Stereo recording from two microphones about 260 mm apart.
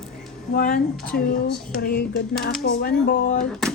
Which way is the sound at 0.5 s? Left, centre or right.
Left.